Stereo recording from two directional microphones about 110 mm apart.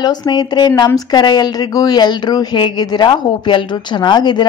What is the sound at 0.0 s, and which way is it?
A woman's voice, 40° left (ahead or behind).